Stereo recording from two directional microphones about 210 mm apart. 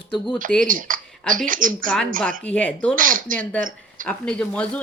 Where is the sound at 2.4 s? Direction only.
5° left (ahead or behind).